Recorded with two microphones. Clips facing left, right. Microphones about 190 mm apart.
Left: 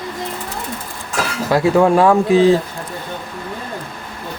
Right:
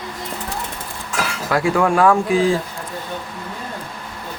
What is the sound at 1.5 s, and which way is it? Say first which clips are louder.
Speech: left 5 dB; 25° left (ahead or behind).